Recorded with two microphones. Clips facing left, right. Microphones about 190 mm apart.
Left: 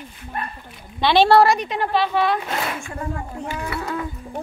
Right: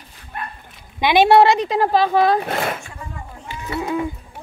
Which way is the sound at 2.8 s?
55° left (ahead or behind).